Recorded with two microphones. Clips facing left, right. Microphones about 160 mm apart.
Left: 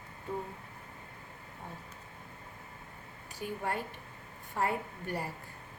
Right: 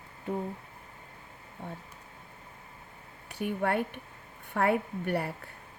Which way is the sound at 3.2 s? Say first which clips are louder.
Right 6 dB; 65° right (ahead or behind).